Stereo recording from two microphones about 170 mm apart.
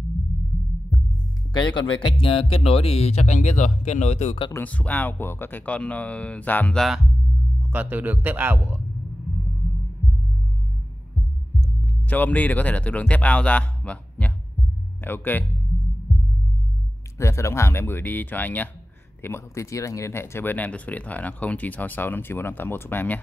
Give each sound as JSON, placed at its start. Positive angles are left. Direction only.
{"t": 1.5, "sound": "speech", "side_deg": 25}
{"t": 4.5, "sound": "speech", "side_deg": 10}
{"t": 7.7, "sound": "a man's voice", "side_deg": -10}
{"t": 12.1, "sound": "speech", "side_deg": 10}
{"t": 16.1, "sound": "heart sounds", "side_deg": 0}
{"t": 17.2, "sound": "speech", "side_deg": 15}